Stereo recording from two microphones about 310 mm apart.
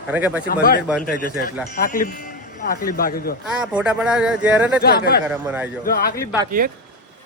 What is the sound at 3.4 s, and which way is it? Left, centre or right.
Speech, centre.